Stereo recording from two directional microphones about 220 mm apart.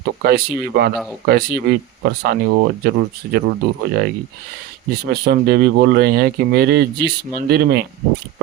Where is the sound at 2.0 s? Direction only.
45° right (ahead or behind).